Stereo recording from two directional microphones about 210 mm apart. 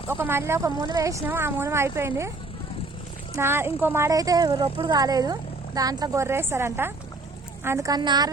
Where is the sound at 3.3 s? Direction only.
10° right (ahead or behind).